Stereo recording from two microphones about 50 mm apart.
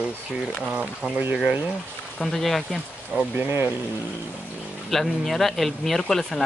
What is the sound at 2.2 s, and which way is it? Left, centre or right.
Speech, centre.